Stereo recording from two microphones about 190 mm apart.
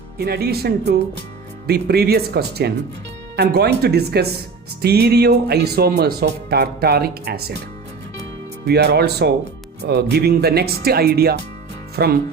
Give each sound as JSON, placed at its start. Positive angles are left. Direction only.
{"t": 0.2, "sound": "speech", "side_deg": -55}
{"t": 8.6, "sound": "speech", "side_deg": -60}